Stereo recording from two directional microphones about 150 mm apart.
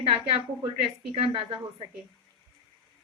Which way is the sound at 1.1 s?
35° right (ahead or behind).